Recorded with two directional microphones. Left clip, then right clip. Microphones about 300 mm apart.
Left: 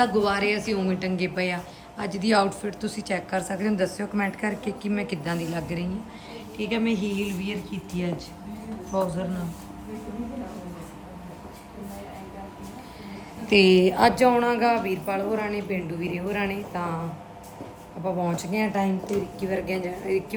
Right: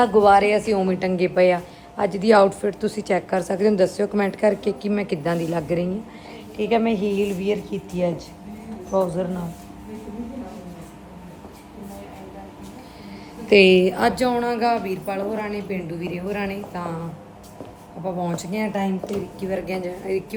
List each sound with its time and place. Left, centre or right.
0.0 s a woman's voice: centre
13.7 s a woman's voice: centre
18.0 s a woman's voice: centre